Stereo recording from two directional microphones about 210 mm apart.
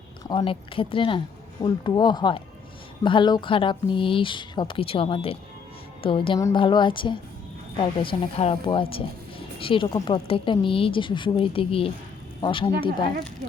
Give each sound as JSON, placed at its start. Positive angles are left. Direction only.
{"t": 0.3, "sound": "speech", "side_deg": 25}